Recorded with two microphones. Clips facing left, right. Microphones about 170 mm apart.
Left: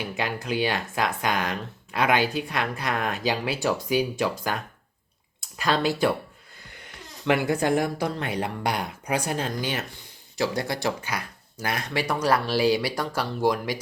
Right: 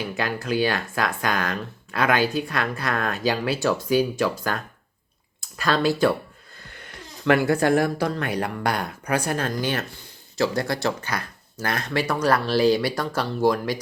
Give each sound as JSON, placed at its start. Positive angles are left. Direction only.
{"t": 0.2, "sound": "speech", "side_deg": 20}